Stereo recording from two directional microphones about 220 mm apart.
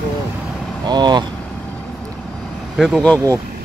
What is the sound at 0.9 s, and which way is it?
Speech, 20° right (ahead or behind).